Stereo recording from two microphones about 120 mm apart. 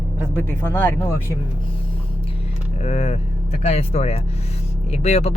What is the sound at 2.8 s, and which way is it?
Speech, 65° left (ahead or behind).